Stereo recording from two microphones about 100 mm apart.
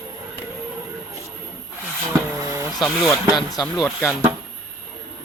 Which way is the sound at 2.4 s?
35° right (ahead or behind).